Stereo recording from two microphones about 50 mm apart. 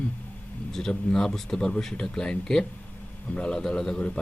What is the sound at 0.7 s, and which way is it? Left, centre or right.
Speech, centre.